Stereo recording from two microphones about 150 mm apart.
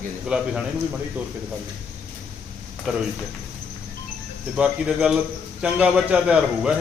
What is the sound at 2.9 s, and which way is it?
Speech, 5° right (ahead or behind).